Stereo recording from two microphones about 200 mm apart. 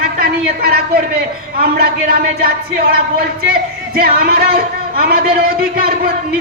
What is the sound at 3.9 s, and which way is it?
Speech, 50° right (ahead or behind).